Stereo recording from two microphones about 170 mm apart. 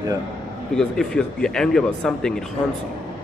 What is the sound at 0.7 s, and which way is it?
Speech, 5° left (ahead or behind).